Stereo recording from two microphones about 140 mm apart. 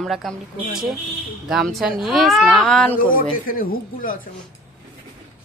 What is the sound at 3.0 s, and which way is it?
A man's voice, 80° left.